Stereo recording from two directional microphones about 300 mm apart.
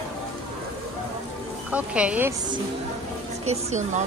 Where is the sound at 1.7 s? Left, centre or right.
Centre.